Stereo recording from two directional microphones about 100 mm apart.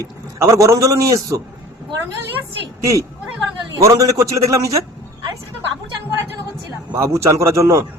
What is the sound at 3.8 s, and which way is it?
Speech, 35° right (ahead or behind).